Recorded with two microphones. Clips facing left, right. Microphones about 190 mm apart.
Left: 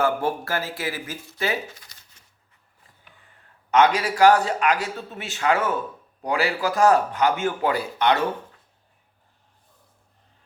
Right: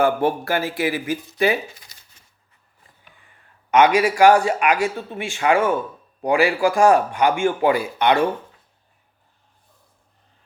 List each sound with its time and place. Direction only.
0.0 s speech: 15° right (ahead or behind)
3.7 s speech: 10° right (ahead or behind)